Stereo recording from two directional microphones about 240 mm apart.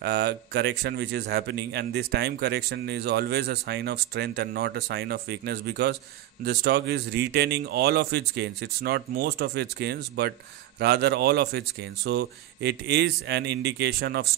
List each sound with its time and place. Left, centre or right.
0.0 s speech: right